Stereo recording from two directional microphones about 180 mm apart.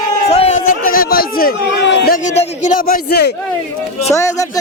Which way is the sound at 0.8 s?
55° left (ahead or behind).